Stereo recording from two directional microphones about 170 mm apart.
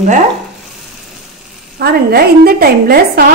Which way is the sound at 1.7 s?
65° right (ahead or behind).